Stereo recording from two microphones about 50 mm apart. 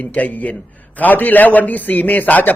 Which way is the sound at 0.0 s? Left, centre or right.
Left.